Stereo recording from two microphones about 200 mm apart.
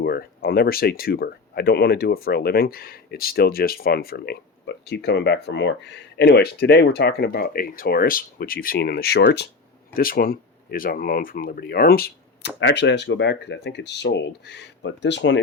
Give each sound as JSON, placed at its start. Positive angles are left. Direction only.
{"t": 0.0, "sound": "speech", "side_deg": 50}